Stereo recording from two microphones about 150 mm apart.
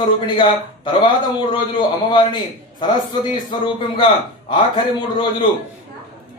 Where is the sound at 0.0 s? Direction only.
30° left (ahead or behind).